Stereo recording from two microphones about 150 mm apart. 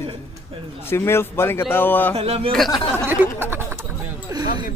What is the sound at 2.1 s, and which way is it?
Speech, 45° right (ahead or behind).